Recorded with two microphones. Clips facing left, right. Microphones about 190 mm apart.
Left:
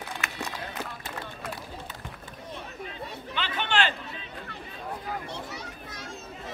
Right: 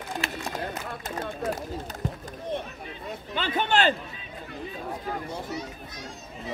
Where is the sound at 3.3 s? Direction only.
40° right (ahead or behind).